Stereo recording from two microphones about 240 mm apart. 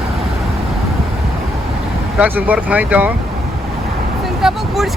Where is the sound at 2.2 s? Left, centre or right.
Centre.